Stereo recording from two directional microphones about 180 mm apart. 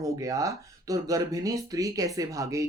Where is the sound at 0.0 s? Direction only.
15° right (ahead or behind).